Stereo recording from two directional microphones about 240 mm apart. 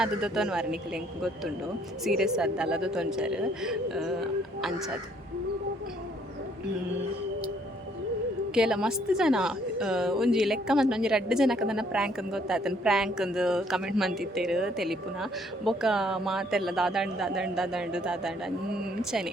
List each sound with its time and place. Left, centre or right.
0.0 s a woman's voice: centre
2.0 s a woman's voice: centre
8.5 s a woman's voice: centre